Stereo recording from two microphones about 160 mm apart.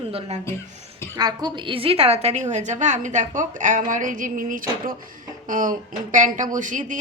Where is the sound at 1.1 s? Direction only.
25° right (ahead or behind).